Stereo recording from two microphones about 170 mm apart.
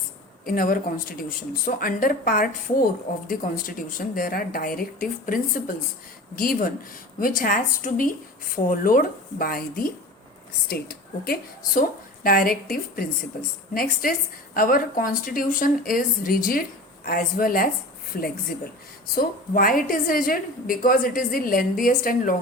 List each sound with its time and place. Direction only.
0.4 s a woman's voice: 55° left (ahead or behind)